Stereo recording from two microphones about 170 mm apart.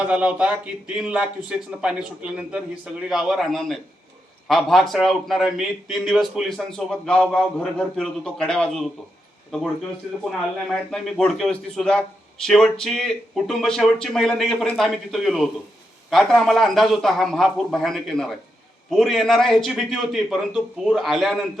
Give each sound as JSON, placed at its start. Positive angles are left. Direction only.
{"t": 0.0, "sound": "a man's voice", "side_deg": -10}
{"t": 10.7, "sound": "a man's voice", "side_deg": 5}